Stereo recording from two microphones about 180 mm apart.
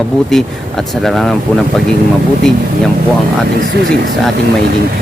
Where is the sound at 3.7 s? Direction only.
65° right (ahead or behind).